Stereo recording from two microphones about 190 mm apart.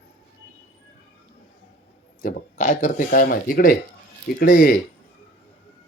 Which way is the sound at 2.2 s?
40° left (ahead or behind).